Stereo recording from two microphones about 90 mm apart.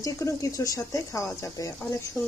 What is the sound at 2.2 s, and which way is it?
Speech, 15° left (ahead or behind).